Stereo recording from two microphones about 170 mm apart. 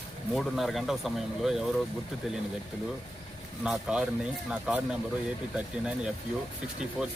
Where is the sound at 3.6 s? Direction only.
5° right (ahead or behind).